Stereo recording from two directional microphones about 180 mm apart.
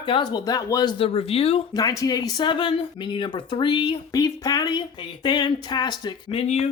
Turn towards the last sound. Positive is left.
turn(degrees=35)  # may be behind; listen again after turning